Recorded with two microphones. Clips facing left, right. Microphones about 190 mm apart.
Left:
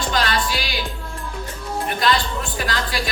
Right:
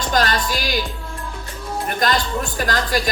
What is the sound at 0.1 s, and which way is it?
Music, 45° right (ahead or behind).